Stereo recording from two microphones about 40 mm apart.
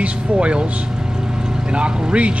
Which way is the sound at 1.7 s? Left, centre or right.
Right.